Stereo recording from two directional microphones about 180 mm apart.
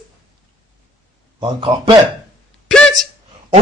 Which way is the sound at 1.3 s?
30° right (ahead or behind).